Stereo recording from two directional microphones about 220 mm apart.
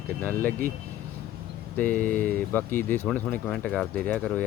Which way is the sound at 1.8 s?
5° left (ahead or behind).